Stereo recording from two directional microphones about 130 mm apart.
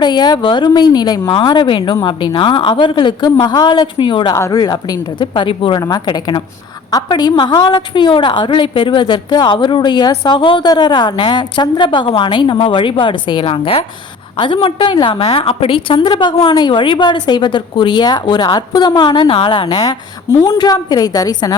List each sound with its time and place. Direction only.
0.0 s a woman's voice: 35° left (ahead or behind)
4.4 s a woman's voice: 25° left (ahead or behind)